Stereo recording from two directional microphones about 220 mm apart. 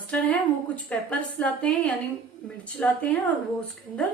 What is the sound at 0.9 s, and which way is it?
A woman's voice, 5° left (ahead or behind).